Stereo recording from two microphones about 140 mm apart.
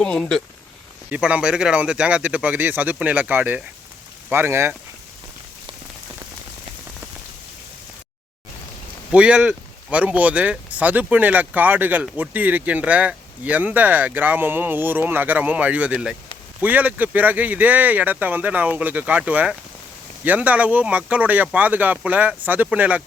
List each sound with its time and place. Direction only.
0.0 s speech: 5° left (ahead or behind)
1.1 s speech: 10° right (ahead or behind)
9.1 s speech: 10° right (ahead or behind)